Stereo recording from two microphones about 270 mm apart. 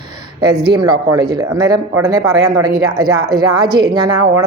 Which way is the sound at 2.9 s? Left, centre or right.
Right.